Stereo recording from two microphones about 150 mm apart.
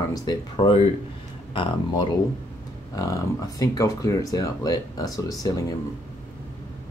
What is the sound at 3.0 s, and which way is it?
Speech, 20° left (ahead or behind).